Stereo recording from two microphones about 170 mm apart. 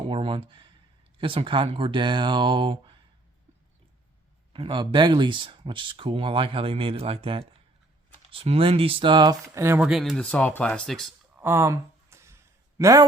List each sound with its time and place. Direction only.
0.1 s speech: 30° right (ahead or behind)
4.5 s speech: 30° right (ahead or behind); by 11.1 s centre (ahead or behind)
11.3 s a sound: 15° right (ahead or behind)